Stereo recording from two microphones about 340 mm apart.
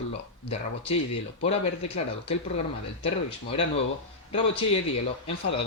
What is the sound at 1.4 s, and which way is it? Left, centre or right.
Speech, centre.